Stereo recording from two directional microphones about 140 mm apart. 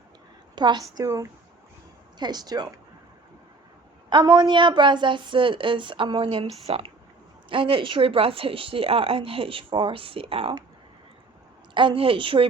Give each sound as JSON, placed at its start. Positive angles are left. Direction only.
{"t": 0.5, "sound": "a woman's voice", "side_deg": -30}
{"t": 4.1, "sound": "a woman's voice", "side_deg": -30}
{"t": 11.7, "sound": "a woman's voice", "side_deg": -35}